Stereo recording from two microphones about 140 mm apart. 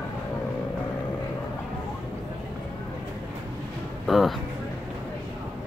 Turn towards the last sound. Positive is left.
turn(degrees=0)  # may be behind; listen again after turning